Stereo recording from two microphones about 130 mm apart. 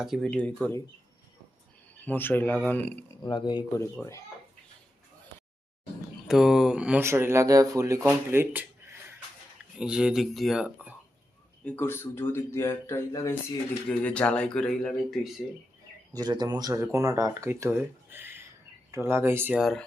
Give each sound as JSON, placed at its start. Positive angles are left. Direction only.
{"t": 0.0, "sound": "speech", "side_deg": 0}
{"t": 2.0, "sound": "speech", "side_deg": 15}
{"t": 3.2, "sound": "speech", "side_deg": 35}
{"t": 6.2, "sound": "speech", "side_deg": -5}
{"t": 7.0, "sound": "speech", "side_deg": -20}
{"t": 9.7, "sound": "speech", "side_deg": -5}
{"t": 11.6, "sound": "speech", "side_deg": 15}
{"t": 14.0, "sound": "speech", "side_deg": 10}
{"t": 16.1, "sound": "speech", "side_deg": -35}
{"t": 19.5, "sound": "speech", "side_deg": 0}